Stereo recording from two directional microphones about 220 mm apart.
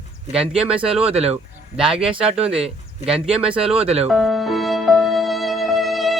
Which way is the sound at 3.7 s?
25° right (ahead or behind).